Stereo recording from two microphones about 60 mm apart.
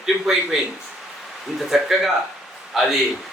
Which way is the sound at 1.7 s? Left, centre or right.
Centre.